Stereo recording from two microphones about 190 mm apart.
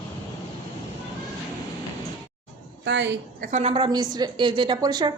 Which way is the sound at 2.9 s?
70° right (ahead or behind).